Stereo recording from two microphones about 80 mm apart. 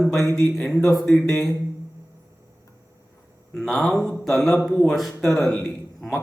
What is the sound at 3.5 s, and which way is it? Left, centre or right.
A man's voice, centre.